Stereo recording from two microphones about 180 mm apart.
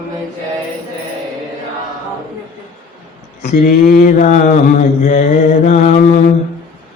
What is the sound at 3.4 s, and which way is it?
Mantra, 50° left (ahead or behind).